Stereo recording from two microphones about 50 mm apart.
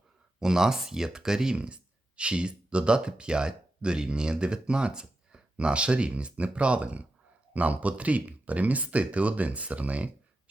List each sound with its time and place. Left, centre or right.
0.3 s speech: centre; by 10.1 s right